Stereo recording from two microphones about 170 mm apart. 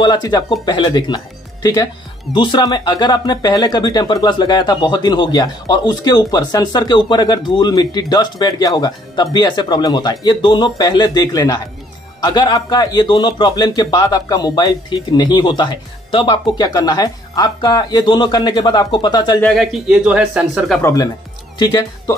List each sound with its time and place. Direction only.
0.0 s speech: 25° left (ahead or behind)
19.4 s speech: centre (ahead or behind)
20.8 s speech: 20° left (ahead or behind)